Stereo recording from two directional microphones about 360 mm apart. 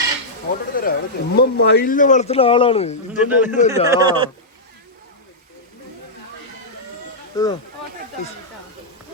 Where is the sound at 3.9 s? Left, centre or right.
Centre.